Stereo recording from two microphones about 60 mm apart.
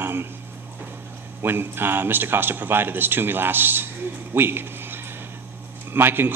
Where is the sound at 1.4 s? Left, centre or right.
Right.